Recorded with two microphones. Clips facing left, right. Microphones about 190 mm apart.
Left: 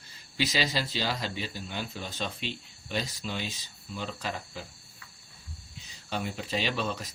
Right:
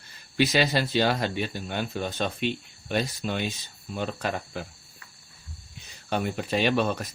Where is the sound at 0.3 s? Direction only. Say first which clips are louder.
Right 7 dB; 60° right (ahead or behind).